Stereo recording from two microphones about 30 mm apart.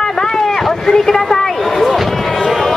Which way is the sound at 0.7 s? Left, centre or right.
Centre.